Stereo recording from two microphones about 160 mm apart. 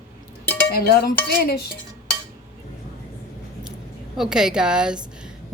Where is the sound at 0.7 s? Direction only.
70° left (ahead or behind).